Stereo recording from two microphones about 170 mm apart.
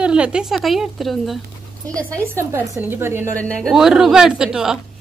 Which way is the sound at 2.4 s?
15° right (ahead or behind).